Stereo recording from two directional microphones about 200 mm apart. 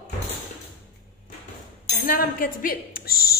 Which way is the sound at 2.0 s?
45° left (ahead or behind).